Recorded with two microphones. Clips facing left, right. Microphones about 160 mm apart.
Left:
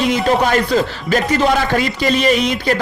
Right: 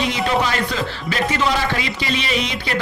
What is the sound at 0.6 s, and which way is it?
Speech, 45° left (ahead or behind).